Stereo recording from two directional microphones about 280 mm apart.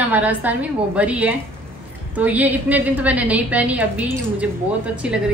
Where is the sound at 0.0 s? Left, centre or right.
Centre.